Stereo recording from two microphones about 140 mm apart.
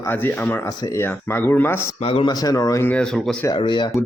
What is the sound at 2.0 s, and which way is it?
Speech, 45° left (ahead or behind).